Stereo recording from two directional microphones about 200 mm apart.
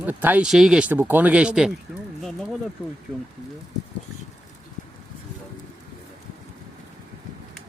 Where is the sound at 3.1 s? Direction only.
20° right (ahead or behind).